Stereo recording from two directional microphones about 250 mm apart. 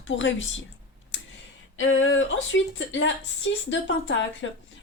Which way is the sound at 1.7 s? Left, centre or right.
Left.